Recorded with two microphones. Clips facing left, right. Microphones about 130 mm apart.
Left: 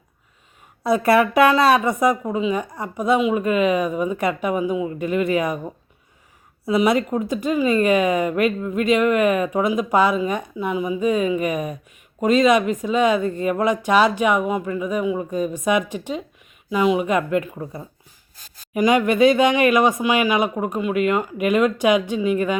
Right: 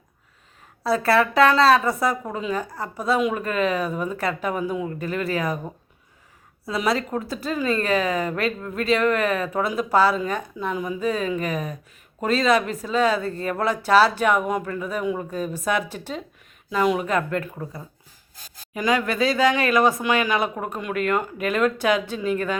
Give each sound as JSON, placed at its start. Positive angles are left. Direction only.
{"t": 0.9, "sound": "speech", "side_deg": 20}
{"t": 3.2, "sound": "speech", "side_deg": 10}
{"t": 6.7, "sound": "speech", "side_deg": 20}
{"t": 16.6, "sound": "speech", "side_deg": 5}
{"t": 18.7, "sound": "speech", "side_deg": 20}